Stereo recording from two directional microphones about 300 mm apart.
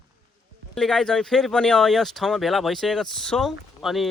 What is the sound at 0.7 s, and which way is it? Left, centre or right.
Speech, centre.